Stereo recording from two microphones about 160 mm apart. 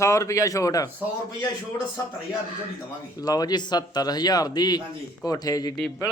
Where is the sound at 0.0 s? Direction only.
20° left (ahead or behind).